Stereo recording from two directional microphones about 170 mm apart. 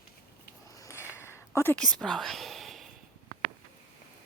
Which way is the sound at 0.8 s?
15° left (ahead or behind).